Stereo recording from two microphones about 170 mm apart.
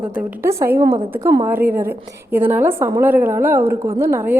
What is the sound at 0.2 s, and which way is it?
Speech, 15° right (ahead or behind).